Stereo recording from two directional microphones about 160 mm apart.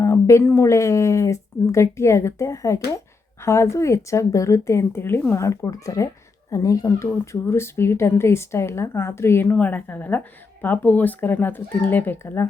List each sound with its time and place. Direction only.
0.0 s a woman's voice: 15° left (ahead or behind)